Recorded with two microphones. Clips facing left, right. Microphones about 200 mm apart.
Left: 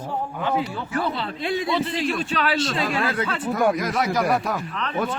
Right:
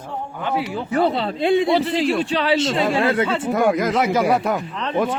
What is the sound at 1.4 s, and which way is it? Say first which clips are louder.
A man's voice: right 8 dB; 30° right (ahead or behind).